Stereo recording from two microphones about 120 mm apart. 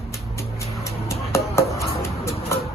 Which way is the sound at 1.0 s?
25° left (ahead or behind).